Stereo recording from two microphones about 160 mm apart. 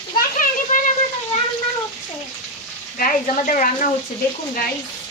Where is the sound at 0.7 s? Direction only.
55° left (ahead or behind).